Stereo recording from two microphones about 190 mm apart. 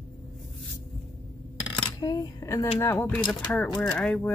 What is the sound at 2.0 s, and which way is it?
Speech, 20° left (ahead or behind).